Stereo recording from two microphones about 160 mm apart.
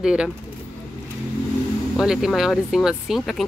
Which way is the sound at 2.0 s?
5° right (ahead or behind).